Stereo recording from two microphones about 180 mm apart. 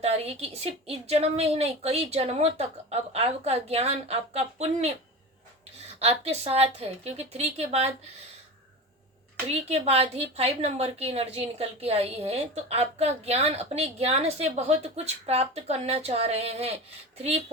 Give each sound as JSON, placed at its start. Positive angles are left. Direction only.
{"t": 0.0, "sound": "a woman's voice", "side_deg": -35}
{"t": 6.0, "sound": "a woman's voice", "side_deg": -35}
{"t": 9.5, "sound": "a woman's voice", "side_deg": -35}